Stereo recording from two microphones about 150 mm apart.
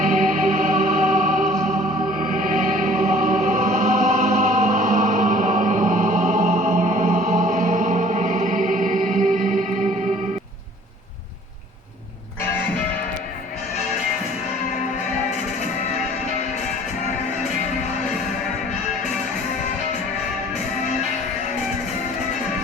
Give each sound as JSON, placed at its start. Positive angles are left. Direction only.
{"t": 0.0, "sound": "music", "side_deg": -60}